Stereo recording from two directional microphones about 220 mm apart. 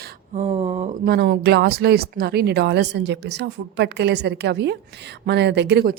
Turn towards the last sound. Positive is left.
turn(degrees=-50)  # may be behind; listen again after turning